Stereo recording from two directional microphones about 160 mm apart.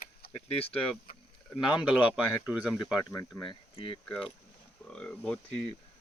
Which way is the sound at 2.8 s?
20° left (ahead or behind).